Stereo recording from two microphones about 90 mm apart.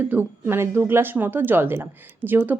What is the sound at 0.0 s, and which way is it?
A woman's voice, 20° right (ahead or behind).